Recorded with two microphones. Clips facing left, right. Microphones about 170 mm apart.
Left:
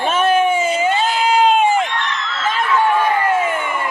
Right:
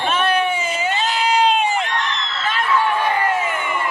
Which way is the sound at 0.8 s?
50° left (ahead or behind).